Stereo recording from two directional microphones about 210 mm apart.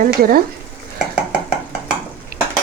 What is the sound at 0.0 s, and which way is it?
Speech, 40° right (ahead or behind).